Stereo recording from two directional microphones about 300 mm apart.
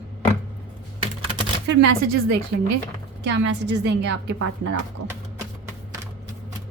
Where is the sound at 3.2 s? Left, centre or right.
Right.